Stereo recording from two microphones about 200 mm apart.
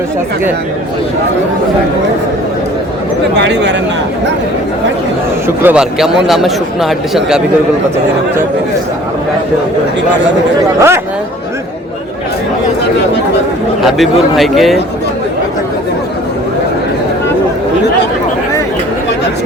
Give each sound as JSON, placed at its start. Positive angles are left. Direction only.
{"t": 3.4, "sound": "speech", "side_deg": -60}
{"t": 5.6, "sound": "speech", "side_deg": -5}
{"t": 10.8, "sound": "speech", "side_deg": -15}
{"t": 13.8, "sound": "speech", "side_deg": 0}